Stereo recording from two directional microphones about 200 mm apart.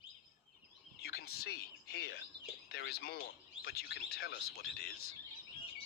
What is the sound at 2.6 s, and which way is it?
Speech, 55° left (ahead or behind).